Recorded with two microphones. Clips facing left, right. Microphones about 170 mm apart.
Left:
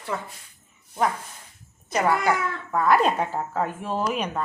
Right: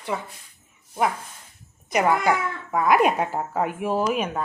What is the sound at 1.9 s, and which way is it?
Speech, 15° right (ahead or behind).